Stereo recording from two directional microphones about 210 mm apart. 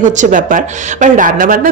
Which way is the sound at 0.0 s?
35° right (ahead or behind).